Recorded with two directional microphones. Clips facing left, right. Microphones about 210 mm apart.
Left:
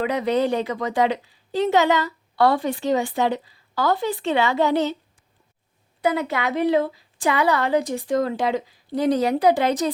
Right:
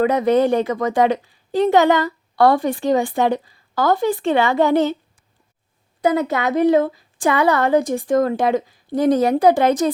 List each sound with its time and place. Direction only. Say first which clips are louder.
0.0 s a woman's voice: right 5 dB; 45° right (ahead or behind)
6.0 s a woman's voice: right 4 dB; 40° right (ahead or behind)